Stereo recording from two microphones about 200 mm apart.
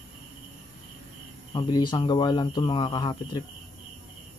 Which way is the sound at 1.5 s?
20° left (ahead or behind).